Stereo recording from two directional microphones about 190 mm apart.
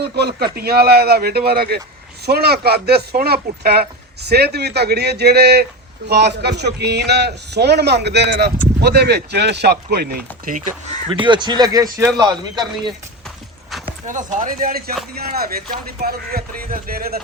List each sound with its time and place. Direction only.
0.0 s speech: 55° right (ahead or behind)
11.1 s speech: 25° right (ahead or behind)
14.1 s speech: 40° right (ahead or behind)